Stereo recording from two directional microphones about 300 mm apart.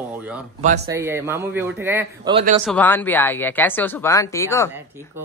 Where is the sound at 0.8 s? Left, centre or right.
Centre.